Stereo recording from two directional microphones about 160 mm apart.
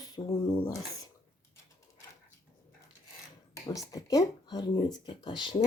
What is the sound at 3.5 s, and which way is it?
Speech, 20° left (ahead or behind).